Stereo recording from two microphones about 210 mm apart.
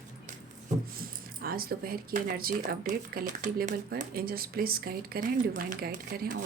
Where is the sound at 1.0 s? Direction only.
45° right (ahead or behind).